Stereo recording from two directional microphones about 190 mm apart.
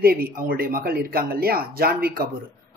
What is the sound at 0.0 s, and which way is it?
Speech, 50° right (ahead or behind).